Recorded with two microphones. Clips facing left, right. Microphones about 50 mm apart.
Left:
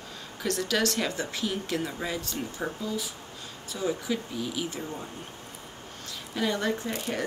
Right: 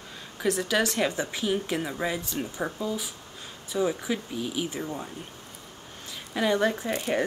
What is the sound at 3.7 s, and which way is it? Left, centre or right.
Speech, right.